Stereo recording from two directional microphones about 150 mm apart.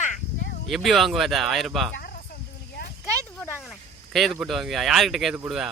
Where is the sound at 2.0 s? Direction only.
75° left (ahead or behind).